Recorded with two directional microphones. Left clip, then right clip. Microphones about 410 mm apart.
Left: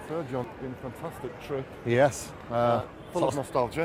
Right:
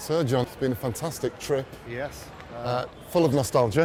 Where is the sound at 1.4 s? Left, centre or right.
Right.